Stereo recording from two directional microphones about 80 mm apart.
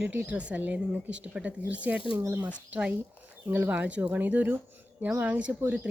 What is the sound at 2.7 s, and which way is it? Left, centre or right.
Speech, centre.